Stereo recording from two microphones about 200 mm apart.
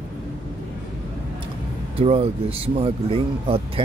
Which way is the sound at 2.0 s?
30° right (ahead or behind).